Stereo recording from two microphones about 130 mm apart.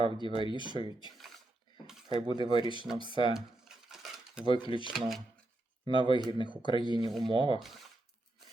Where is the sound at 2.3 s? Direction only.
40° left (ahead or behind).